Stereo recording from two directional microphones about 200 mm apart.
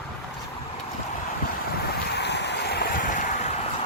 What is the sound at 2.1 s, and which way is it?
Boat, 60° left (ahead or behind).